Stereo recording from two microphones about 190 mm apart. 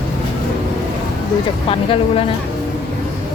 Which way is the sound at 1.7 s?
30° left (ahead or behind).